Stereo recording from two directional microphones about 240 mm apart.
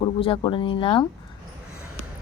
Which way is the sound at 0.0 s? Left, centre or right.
Left.